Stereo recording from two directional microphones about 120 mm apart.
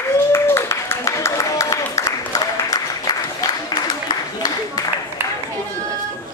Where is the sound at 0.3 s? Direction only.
20° left (ahead or behind).